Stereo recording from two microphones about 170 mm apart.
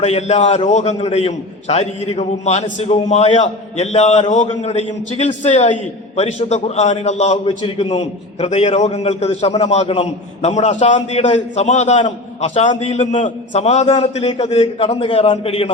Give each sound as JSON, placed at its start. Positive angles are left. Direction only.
{"t": 0.0, "sound": "a man's voice", "side_deg": 40}